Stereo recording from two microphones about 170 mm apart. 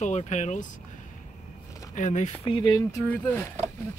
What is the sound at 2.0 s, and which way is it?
Speech, 45° left (ahead or behind).